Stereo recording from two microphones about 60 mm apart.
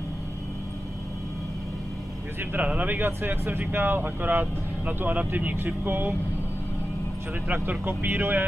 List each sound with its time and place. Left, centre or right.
2.5 s speech: right
7.8 s speech: right